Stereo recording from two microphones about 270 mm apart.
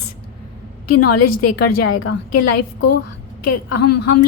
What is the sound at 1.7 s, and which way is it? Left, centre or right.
A woman's voice, left.